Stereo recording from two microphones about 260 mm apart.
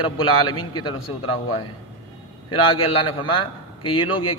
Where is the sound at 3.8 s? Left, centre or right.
Centre.